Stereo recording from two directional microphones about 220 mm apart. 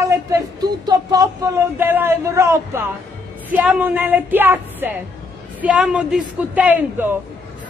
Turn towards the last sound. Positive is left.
turn(degrees=-10)  # may be behind; listen again after turning